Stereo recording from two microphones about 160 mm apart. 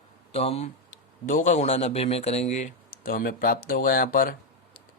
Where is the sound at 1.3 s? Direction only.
55° left (ahead or behind).